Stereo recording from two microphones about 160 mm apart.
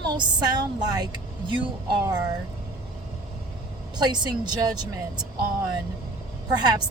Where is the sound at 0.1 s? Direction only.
25° right (ahead or behind).